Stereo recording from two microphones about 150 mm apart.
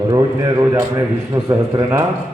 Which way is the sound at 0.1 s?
25° right (ahead or behind).